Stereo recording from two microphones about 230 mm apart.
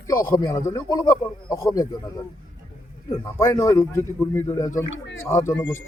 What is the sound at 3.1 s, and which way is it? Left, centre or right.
Speech, centre.